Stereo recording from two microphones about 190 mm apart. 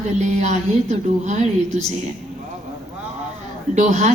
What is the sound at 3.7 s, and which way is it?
Speech, 40° right (ahead or behind).